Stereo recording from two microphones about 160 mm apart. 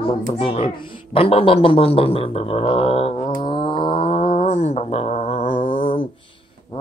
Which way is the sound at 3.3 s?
30° left (ahead or behind).